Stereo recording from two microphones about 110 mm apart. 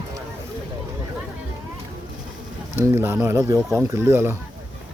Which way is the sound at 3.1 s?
20° right (ahead or behind).